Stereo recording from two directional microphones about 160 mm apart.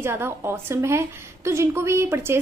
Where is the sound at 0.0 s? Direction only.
15° right (ahead or behind).